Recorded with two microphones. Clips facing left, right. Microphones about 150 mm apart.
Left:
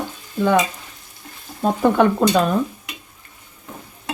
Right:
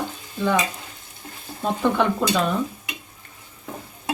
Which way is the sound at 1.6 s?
45° left (ahead or behind).